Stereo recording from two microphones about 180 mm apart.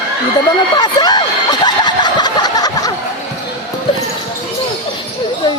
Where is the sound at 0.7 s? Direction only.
25° left (ahead or behind).